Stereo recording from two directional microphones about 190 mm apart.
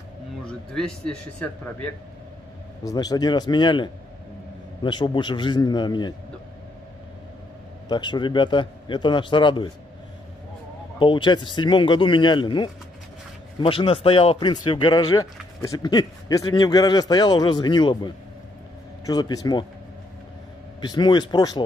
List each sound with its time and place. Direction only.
0.5 s speech: 5° left (ahead or behind)
2.8 s a man's voice: 20° left (ahead or behind)
7.9 s a man's voice: 25° left (ahead or behind)
11.0 s a man's voice: 25° left (ahead or behind)
20.8 s a man's voice: 25° left (ahead or behind)